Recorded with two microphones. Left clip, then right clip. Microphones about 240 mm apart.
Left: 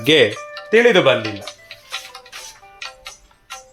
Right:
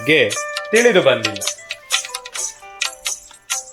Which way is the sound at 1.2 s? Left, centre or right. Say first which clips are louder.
Right 4 dB; right.